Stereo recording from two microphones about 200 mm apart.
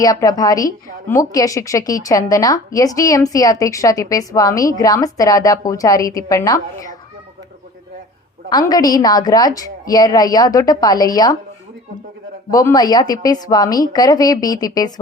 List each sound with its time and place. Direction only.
0.0 s a woman's voice: 15° left (ahead or behind)
8.4 s a woman's voice: 20° left (ahead or behind)
12.5 s a woman's voice: 20° left (ahead or behind)